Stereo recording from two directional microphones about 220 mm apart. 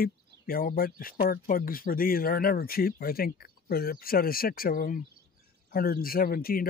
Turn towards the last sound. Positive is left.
turn(degrees=40)  # may be behind; listen again after turning